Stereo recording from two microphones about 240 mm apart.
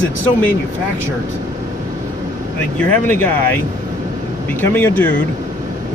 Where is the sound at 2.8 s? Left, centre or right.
Centre.